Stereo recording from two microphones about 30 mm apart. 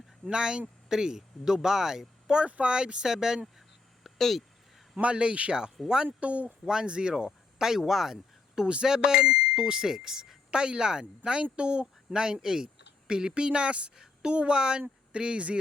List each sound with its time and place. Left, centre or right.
0.3 s speech: right
2.6 s speech: right
4.0 s a sound: centre
5.1 s speech: right
5.8 s speech: centre
6.1 s speech: right
6.8 s speech: right
7.3 s speech: centre
8.6 s speech: right; by 10.3 s centre
10.5 s speech: right
12.1 s speech: right